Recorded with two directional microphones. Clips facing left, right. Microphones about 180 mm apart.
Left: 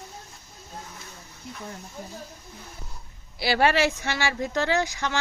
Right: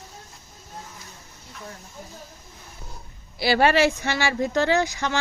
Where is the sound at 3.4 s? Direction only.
35° right (ahead or behind).